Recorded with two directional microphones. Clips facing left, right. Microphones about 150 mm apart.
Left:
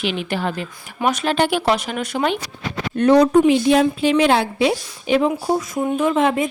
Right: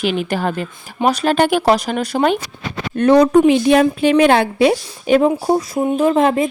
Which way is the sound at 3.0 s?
55° right (ahead or behind).